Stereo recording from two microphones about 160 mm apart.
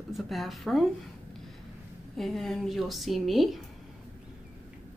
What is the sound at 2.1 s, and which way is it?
Speech, centre (ahead or behind).